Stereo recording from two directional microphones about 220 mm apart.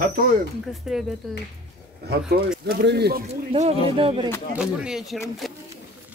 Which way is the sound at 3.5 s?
25° right (ahead or behind).